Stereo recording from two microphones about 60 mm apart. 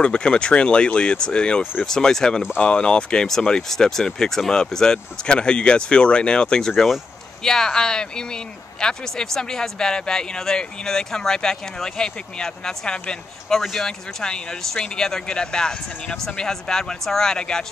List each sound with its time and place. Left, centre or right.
0.0 s speech: centre
13.6 s speech: centre